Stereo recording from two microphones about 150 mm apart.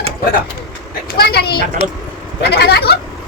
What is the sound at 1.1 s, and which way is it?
A woman's voice, 90° left.